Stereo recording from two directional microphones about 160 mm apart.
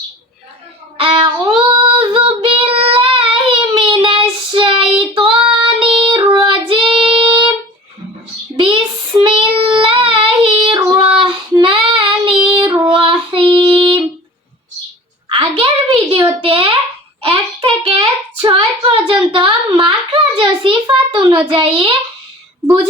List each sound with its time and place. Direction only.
0.9 s child singing: 35° right (ahead or behind)
6.2 s child singing: centre (ahead or behind)
6.5 s child singing: 35° right (ahead or behind)
8.5 s child singing: 30° right (ahead or behind)
12.5 s female singing: 30° right (ahead or behind)
15.3 s a sound: 35° right (ahead or behind)
17.2 s child singing: 35° right (ahead or behind)
19.3 s a sound: 35° right (ahead or behind)